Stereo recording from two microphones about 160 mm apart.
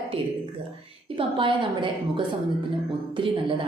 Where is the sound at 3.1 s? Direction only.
35° right (ahead or behind).